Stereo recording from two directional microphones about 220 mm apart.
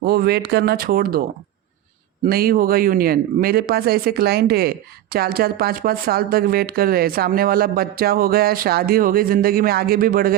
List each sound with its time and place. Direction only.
0.0 s speech: 45° right (ahead or behind)
2.2 s speech: 40° right (ahead or behind)